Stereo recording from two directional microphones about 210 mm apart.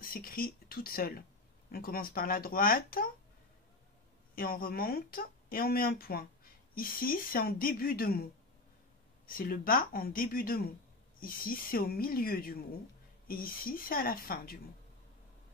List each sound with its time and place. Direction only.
0.0 s speech: 45° left (ahead or behind)
4.4 s speech: 45° left (ahead or behind)